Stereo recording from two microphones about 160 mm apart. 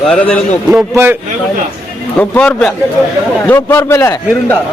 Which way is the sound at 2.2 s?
5° left (ahead or behind).